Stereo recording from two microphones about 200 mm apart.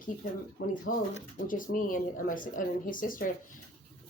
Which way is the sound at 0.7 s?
40° left (ahead or behind).